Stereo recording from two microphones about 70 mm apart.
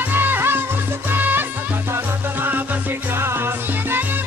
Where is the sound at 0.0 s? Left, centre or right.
Right.